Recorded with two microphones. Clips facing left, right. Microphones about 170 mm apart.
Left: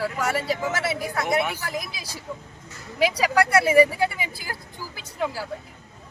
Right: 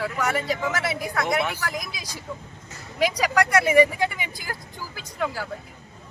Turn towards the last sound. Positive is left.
turn(degrees=30)  # may be behind; listen again after turning